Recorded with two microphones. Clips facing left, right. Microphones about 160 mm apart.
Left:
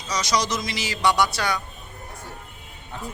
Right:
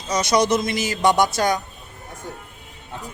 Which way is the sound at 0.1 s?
55° right (ahead or behind).